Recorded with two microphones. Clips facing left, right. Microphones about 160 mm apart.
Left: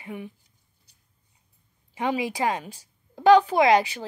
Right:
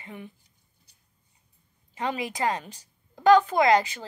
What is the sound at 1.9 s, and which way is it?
Speech, 15° left (ahead or behind).